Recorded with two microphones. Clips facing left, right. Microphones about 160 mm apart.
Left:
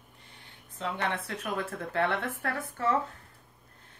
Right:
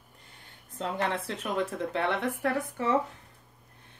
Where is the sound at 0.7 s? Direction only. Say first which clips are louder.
Right 2 dB; 40° right (ahead or behind).